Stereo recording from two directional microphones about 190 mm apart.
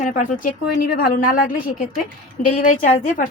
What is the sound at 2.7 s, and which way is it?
Speech, 40° left (ahead or behind).